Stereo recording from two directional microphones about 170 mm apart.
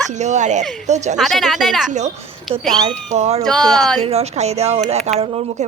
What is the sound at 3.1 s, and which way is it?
Speech, 40° right (ahead or behind).